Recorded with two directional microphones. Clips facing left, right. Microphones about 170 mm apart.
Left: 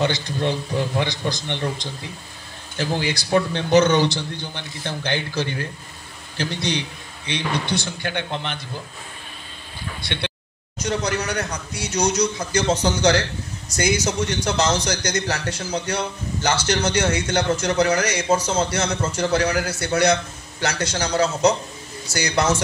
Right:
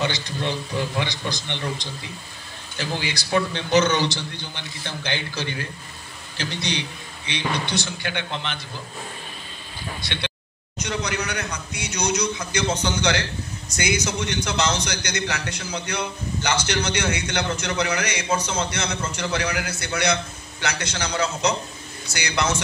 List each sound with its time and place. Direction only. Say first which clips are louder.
0.0 s a man's voice: left 4 dB; 50° left (ahead or behind)
3.0 s a man's voice: left 3 dB; 50° left (ahead or behind)
10.8 s a man's voice: left 4 dB; 45° left (ahead or behind)